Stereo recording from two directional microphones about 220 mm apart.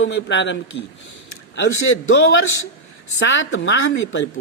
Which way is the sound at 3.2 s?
60° left (ahead or behind).